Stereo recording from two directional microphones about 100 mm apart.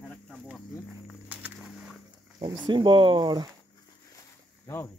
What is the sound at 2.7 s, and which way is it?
Speech, 55° right (ahead or behind).